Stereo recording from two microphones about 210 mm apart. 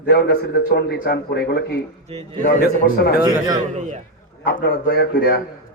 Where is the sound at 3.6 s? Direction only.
35° right (ahead or behind).